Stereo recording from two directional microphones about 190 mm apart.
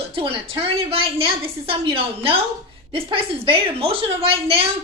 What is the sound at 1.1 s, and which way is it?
A woman's voice, 30° right (ahead or behind).